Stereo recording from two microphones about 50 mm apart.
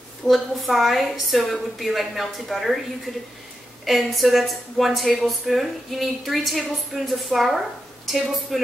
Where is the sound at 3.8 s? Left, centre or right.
Centre.